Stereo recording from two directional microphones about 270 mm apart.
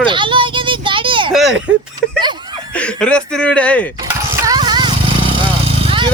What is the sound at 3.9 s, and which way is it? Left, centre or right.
Vehicle, centre.